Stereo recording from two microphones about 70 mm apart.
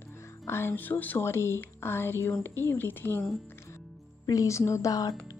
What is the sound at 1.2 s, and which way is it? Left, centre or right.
Speech, left.